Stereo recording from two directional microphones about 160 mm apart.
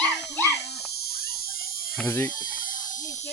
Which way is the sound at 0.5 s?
90° left.